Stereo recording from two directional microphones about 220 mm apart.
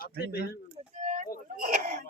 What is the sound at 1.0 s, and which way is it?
Speech, 30° right (ahead or behind).